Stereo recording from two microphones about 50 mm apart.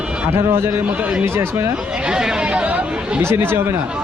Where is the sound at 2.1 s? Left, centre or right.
Centre.